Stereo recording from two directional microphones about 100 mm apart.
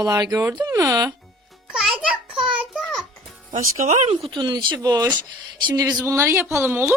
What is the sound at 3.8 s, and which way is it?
Speech, 90° right.